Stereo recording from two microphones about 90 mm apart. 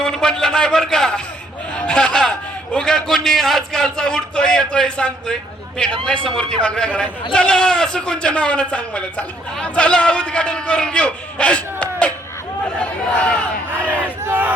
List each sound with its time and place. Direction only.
0.0 s a man's voice: 5° left (ahead or behind)
1.8 s a sound: 10° left (ahead or behind)
2.7 s a man's voice: 5° left (ahead or behind)
14.3 s battle cry: 20° right (ahead or behind)